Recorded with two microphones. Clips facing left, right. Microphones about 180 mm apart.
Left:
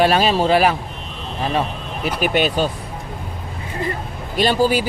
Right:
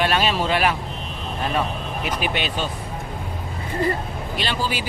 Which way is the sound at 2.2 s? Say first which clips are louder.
Left 10 dB; 45° left (ahead or behind).